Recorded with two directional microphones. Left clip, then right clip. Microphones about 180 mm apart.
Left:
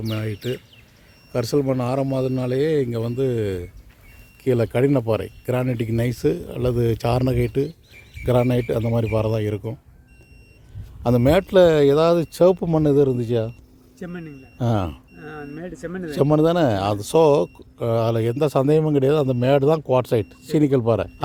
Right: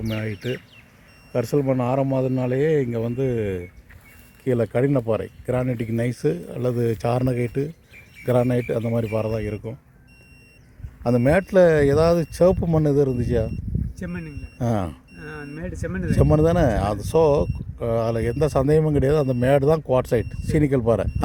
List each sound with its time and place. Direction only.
0.1 s speech: 5° left (ahead or behind); by 9.7 s 25° left (ahead or behind)
11.0 s speech: 20° left (ahead or behind)
14.0 s speech: 30° right (ahead or behind)
14.6 s speech: 15° left (ahead or behind)
15.1 s speech: 35° right (ahead or behind)
16.1 s speech: 15° left (ahead or behind)